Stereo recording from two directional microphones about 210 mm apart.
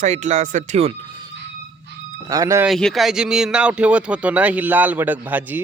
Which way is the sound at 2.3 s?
15° right (ahead or behind).